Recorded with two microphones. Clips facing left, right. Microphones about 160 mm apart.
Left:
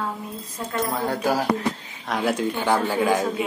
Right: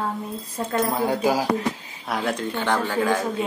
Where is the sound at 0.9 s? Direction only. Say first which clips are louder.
Even; 10° right (ahead or behind).